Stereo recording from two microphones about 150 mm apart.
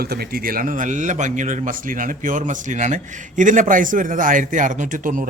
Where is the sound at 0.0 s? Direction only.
90° right.